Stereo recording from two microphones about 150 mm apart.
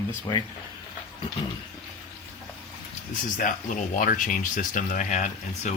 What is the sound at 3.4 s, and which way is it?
Speech, 60° left (ahead or behind).